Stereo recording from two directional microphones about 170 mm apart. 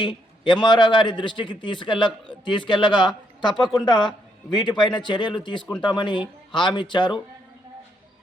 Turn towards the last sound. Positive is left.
turn(degrees=30)  # may be behind; listen again after turning